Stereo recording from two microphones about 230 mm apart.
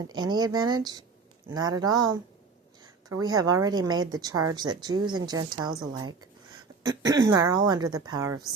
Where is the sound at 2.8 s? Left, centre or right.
Centre.